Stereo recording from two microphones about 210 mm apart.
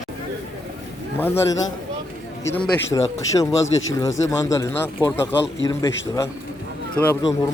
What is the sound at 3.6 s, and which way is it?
Speech, 70° left (ahead or behind).